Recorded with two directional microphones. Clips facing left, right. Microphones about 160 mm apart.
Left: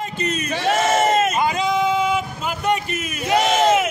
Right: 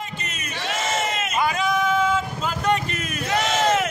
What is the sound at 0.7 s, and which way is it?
Crowd, 45° left (ahead or behind).